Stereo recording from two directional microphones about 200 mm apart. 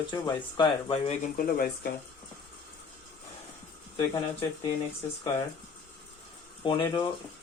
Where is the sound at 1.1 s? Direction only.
45° left (ahead or behind).